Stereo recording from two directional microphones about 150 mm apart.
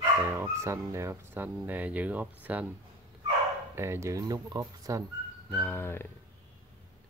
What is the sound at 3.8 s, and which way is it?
Speech, 20° right (ahead or behind).